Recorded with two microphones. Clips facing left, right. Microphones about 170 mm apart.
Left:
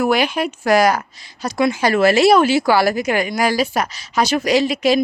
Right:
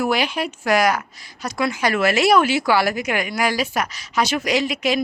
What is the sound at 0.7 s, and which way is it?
Speech, 35° left (ahead or behind).